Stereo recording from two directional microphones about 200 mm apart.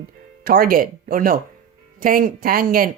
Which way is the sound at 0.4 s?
45° right (ahead or behind).